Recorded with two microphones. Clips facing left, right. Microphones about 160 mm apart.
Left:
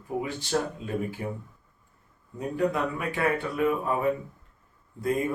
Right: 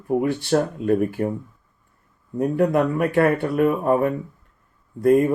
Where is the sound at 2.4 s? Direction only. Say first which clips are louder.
Right 8 dB; 55° right (ahead or behind).